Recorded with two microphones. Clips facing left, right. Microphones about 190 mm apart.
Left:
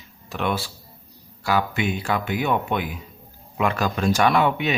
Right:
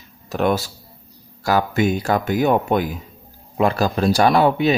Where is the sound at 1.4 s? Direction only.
40° right (ahead or behind).